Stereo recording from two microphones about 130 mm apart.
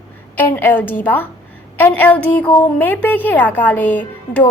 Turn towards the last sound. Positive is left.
turn(degrees=10)  # may be behind; listen again after turning